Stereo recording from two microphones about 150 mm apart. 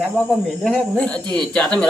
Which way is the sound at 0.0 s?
Centre (ahead or behind).